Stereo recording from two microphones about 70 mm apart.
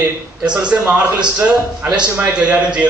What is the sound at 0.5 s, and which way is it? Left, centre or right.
A man's voice, centre.